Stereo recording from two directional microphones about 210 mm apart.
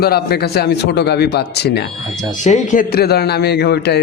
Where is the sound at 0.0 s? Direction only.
50° left (ahead or behind).